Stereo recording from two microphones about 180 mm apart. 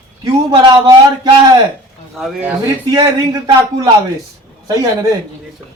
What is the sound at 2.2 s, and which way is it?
Speech, 5° right (ahead or behind).